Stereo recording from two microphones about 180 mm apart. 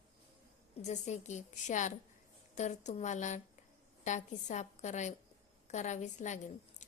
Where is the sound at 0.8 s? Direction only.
40° left (ahead or behind).